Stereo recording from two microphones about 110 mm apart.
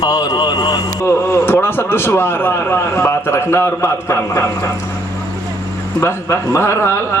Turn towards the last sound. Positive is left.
turn(degrees=25)  # may be behind; listen again after turning